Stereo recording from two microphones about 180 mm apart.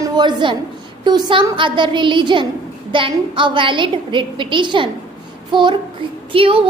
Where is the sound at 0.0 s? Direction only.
25° right (ahead or behind).